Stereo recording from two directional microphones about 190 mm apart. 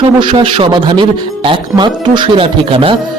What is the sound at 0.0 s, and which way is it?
Speech, 25° right (ahead or behind).